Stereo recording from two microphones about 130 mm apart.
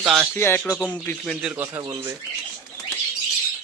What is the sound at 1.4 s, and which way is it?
Speech, 15° right (ahead or behind).